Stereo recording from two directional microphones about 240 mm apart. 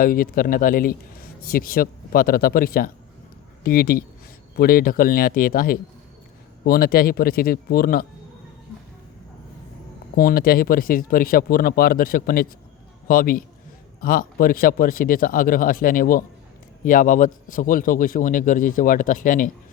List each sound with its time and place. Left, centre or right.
0.0 s speech: left
10.2 s speech: left